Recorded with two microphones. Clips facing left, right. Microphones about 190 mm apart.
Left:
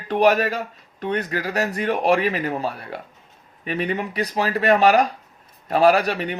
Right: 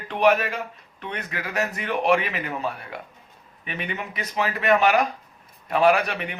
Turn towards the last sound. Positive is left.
turn(degrees=35)  # may be behind; listen again after turning